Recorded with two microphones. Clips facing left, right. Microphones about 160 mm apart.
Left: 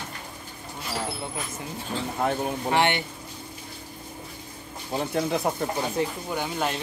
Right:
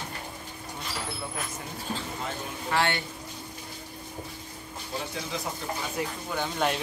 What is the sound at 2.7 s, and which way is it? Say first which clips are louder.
Speech: left 3 dB; 20° left (ahead or behind).